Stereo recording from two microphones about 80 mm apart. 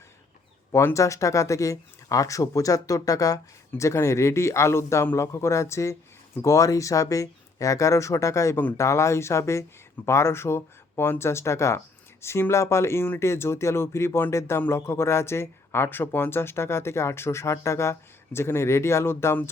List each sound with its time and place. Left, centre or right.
0.7 s speech: left